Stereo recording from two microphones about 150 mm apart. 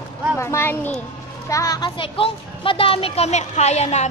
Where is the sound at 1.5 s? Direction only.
25° left (ahead or behind).